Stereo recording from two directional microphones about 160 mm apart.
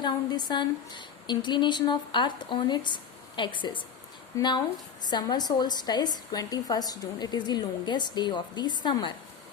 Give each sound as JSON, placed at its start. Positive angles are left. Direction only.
{"t": 0.0, "sound": "a woman's voice", "side_deg": 25}